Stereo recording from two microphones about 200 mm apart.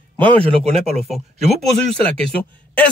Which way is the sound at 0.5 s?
30° right (ahead or behind).